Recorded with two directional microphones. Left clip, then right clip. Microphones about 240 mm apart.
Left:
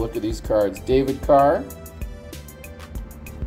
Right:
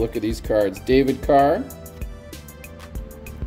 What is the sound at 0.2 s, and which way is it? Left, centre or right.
Speech, right.